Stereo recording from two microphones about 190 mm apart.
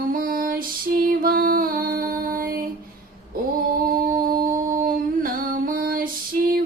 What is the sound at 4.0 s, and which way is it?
Singing, 50° right (ahead or behind).